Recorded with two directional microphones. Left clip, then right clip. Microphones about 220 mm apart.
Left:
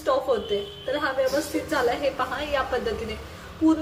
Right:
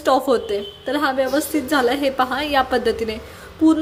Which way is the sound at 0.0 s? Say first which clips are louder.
Right 6 dB; 50° right (ahead or behind).